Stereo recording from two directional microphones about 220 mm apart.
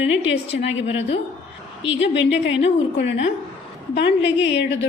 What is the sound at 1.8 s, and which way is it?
Speech, 55° left (ahead or behind).